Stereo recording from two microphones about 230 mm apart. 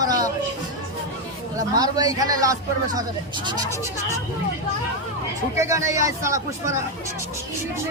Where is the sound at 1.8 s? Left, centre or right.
Centre.